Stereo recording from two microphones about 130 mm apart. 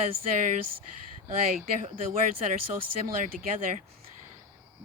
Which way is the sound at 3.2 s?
85° right.